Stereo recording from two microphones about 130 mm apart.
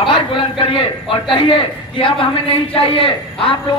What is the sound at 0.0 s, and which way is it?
A man's voice, 40° left (ahead or behind).